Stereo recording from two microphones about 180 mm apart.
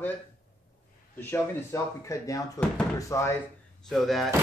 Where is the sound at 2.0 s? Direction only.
20° left (ahead or behind).